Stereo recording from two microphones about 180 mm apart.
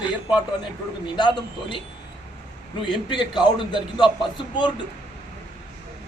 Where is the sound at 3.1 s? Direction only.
25° left (ahead or behind).